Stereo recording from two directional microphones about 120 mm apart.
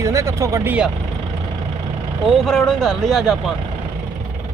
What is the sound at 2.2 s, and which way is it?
Speech, 5° left (ahead or behind).